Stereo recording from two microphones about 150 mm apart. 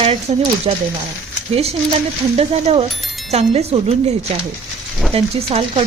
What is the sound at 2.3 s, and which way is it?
A woman's voice, 40° right (ahead or behind).